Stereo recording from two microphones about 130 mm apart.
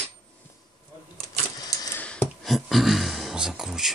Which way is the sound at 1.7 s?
25° left (ahead or behind).